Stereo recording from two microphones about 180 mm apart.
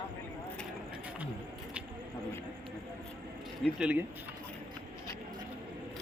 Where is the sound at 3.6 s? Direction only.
5° right (ahead or behind).